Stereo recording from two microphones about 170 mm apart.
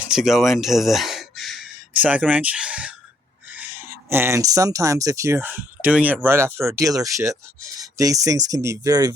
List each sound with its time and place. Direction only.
0.0 s speech: 5° right (ahead or behind); by 9.1 s 20° right (ahead or behind)